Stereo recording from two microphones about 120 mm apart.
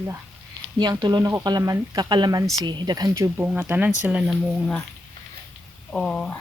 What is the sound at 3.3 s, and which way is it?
Speech, 15° right (ahead or behind).